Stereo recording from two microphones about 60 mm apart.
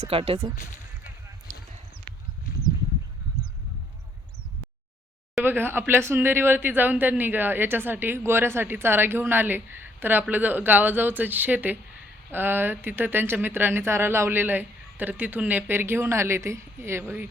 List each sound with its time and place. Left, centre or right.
5.4 s speech: right